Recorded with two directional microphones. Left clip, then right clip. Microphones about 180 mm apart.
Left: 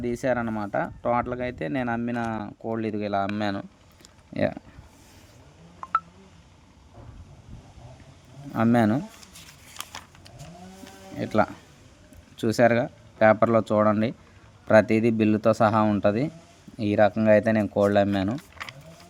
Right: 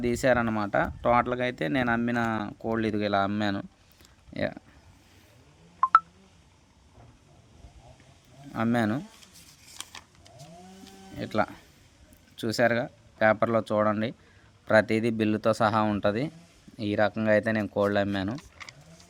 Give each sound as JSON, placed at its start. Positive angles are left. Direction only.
{"t": 0.0, "sound": "speech", "side_deg": 0}
{"t": 8.5, "sound": "speech", "side_deg": 0}
{"t": 9.9, "sound": "a sound", "side_deg": 30}
{"t": 11.1, "sound": "speech", "side_deg": 0}